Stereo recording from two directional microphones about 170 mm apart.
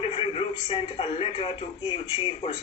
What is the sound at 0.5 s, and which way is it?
Speech, 30° left (ahead or behind).